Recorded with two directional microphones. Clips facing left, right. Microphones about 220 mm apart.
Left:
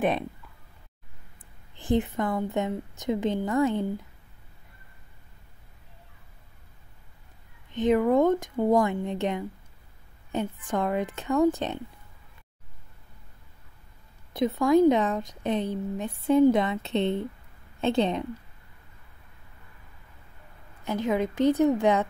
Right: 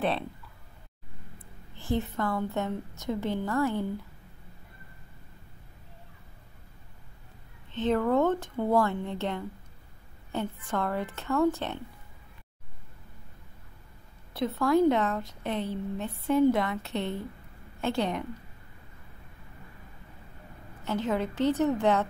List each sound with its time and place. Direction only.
1.8 s a woman's voice: 15° left (ahead or behind)
7.7 s a woman's voice: 15° left (ahead or behind)
14.3 s a woman's voice: 15° left (ahead or behind)
20.8 s a woman's voice: 15° left (ahead or behind)